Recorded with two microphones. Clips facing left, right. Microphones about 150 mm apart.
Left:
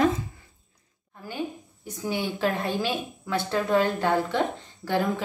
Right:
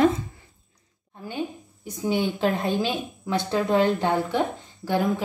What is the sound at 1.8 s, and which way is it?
A woman's voice, 15° right (ahead or behind).